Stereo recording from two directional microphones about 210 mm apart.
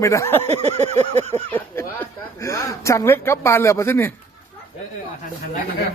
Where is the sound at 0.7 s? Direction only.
30° right (ahead or behind).